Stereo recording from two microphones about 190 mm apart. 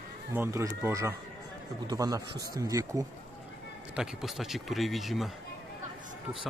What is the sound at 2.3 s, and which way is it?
Speech, 55° right (ahead or behind).